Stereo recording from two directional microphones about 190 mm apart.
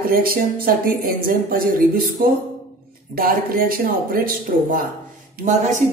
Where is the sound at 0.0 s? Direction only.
50° right (ahead or behind).